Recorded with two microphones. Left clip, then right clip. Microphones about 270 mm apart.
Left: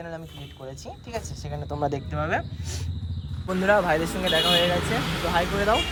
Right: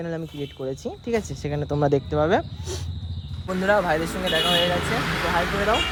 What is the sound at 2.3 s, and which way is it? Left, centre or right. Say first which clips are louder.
Speech: right 5 dB; right.